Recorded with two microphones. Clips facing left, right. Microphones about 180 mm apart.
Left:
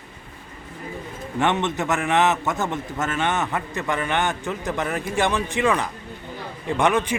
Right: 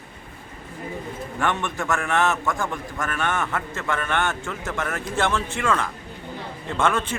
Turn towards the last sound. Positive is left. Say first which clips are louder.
# left 3 dB
turn(degrees=15)  # may be behind; listen again after turning